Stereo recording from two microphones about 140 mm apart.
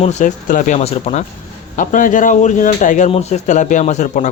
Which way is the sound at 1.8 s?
70° left (ahead or behind).